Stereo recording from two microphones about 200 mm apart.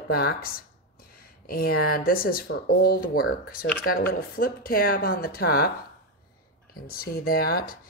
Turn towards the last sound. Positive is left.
turn(degrees=45)  # may be behind; listen again after turning